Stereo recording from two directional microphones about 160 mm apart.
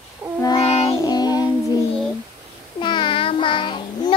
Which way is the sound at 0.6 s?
35° left (ahead or behind).